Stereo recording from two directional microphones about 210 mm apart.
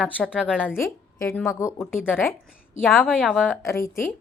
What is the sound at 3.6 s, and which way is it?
Speech, 15° left (ahead or behind).